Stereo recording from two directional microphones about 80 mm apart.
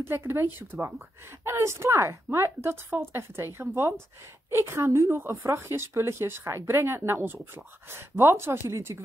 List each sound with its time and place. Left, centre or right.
0.0 s a woman's voice: right